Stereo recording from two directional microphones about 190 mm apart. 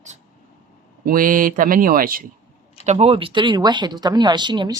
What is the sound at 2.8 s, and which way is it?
Speech, 35° right (ahead or behind).